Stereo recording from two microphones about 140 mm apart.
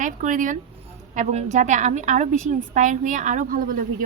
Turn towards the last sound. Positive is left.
turn(degrees=-75)  # may be behind; listen again after turning